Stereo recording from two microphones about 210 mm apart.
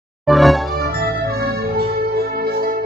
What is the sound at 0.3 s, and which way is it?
Music, centre (ahead or behind).